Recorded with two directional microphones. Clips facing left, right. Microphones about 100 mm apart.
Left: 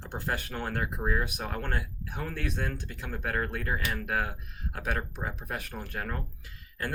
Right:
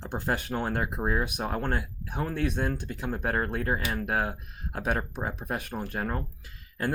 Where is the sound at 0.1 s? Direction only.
25° right (ahead or behind).